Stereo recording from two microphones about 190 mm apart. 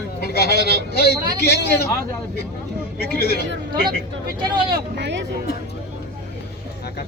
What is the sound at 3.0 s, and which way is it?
Speech, 55° left (ahead or behind).